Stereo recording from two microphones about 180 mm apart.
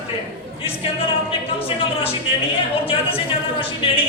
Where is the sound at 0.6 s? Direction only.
30° left (ahead or behind).